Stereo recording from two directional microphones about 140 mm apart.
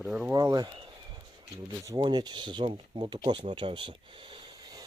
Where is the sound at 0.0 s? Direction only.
10° right (ahead or behind).